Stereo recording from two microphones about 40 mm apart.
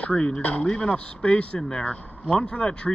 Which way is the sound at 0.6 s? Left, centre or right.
Left.